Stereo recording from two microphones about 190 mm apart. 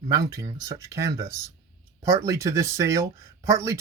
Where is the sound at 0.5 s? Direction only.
15° right (ahead or behind).